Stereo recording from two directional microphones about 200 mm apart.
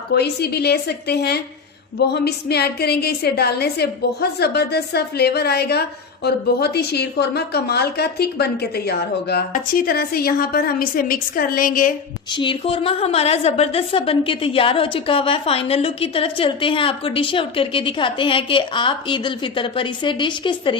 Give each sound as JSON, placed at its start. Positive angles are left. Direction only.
{"t": 0.1, "sound": "a woman's voice", "side_deg": 55}
{"t": 12.3, "sound": "a woman's voice", "side_deg": 25}